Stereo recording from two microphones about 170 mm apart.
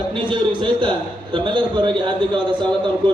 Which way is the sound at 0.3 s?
30° right (ahead or behind).